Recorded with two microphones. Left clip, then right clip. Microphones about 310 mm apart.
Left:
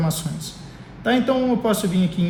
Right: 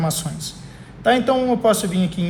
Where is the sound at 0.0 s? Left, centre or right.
Right.